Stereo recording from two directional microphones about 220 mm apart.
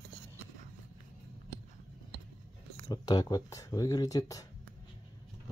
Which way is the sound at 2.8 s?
20° left (ahead or behind).